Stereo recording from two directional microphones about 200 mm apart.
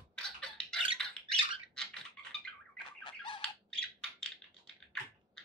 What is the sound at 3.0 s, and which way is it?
Squawk, 25° left (ahead or behind).